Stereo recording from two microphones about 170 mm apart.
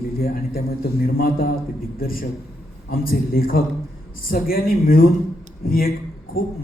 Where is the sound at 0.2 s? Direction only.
60° left (ahead or behind).